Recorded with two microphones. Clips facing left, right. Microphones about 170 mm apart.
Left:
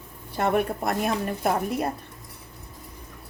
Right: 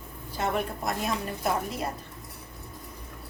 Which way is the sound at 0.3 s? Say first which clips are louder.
Left 6 dB; 60° left (ahead or behind).